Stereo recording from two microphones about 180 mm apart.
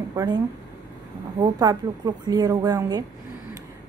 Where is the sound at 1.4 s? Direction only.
20° right (ahead or behind).